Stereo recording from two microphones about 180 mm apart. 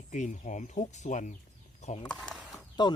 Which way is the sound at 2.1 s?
5° left (ahead or behind).